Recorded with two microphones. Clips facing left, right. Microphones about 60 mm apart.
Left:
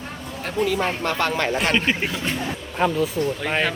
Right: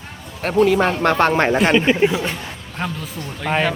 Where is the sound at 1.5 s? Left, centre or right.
Centre.